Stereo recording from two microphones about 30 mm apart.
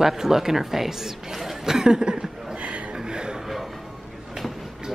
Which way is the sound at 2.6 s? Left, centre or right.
Right.